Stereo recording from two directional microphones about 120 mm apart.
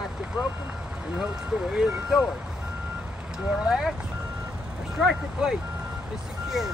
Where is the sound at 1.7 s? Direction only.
5° right (ahead or behind).